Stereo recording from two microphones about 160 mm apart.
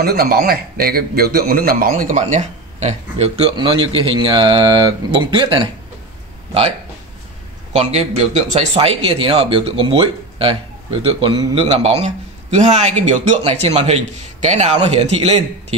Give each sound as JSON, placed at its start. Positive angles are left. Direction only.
{"t": 0.0, "sound": "speech", "side_deg": -75}
{"t": 7.7, "sound": "speech", "side_deg": -45}